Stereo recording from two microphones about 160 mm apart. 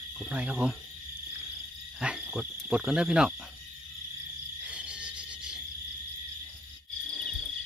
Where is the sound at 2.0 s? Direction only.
5° right (ahead or behind).